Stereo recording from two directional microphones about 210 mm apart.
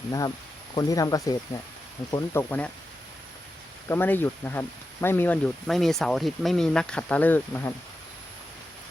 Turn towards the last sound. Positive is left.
turn(degrees=10)  # may be behind; listen again after turning